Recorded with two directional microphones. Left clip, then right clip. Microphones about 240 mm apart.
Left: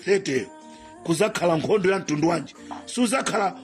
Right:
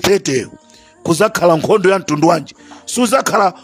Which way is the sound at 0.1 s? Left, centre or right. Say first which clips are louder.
Right 8 dB; right.